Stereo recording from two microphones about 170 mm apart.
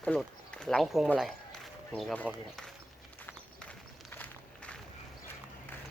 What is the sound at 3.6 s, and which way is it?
Walk, 10° left (ahead or behind).